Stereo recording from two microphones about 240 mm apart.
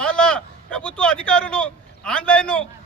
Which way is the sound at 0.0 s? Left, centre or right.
Centre.